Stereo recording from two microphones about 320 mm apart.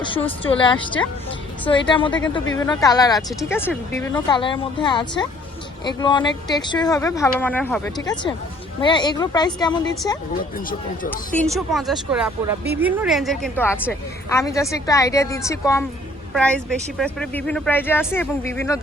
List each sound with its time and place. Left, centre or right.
0.0 s speech: centre
1.9 s speech: centre
10.7 s speech: left
11.3 s speech: centre